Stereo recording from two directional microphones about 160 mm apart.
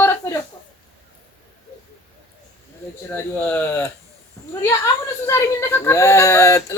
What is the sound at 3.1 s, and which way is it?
A child's voice, 15° left (ahead or behind).